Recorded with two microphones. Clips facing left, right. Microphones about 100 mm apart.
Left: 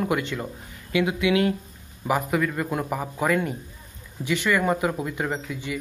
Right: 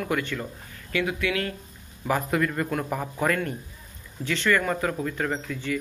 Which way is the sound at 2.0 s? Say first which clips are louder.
Left 1 dB; 10° left (ahead or behind).